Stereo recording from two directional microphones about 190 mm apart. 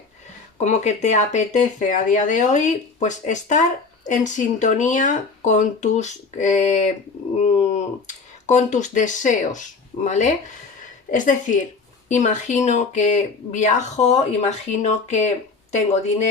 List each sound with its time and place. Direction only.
0.6 s speech: 35° left (ahead or behind)